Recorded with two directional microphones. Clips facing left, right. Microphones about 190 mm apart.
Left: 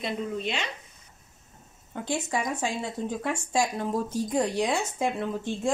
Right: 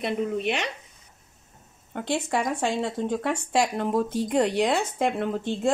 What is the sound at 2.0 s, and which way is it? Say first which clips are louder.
A woman's voice: right 3 dB; 65° right (ahead or behind).